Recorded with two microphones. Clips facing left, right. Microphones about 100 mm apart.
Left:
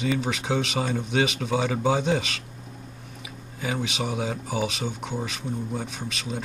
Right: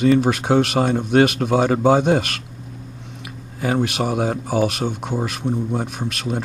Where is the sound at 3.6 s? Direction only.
60° right (ahead or behind).